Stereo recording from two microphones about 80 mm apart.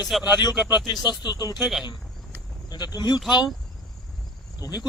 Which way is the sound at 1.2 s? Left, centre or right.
Left.